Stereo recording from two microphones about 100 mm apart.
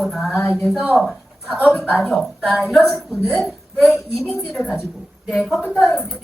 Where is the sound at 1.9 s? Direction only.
15° left (ahead or behind).